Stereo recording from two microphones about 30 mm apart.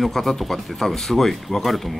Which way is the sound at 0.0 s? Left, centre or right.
Centre.